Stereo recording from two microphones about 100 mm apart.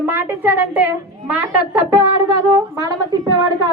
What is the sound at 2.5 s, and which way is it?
Speech, 40° right (ahead or behind).